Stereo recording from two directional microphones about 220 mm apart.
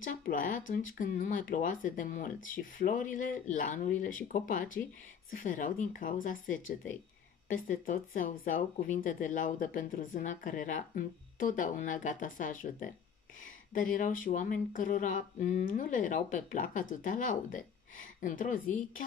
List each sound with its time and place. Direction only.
0.0 s speech: 40° left (ahead or behind)